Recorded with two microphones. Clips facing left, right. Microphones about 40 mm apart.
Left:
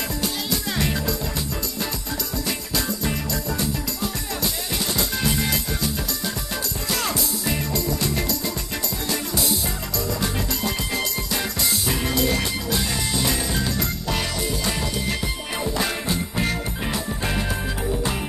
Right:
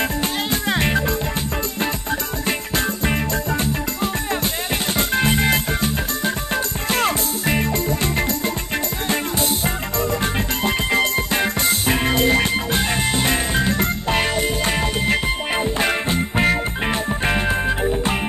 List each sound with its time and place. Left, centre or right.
0.2 s music: right
2.4 s music: right
9.9 s music: right